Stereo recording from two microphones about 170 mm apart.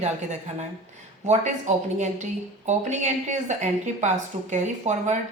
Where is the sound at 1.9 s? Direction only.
45° right (ahead or behind).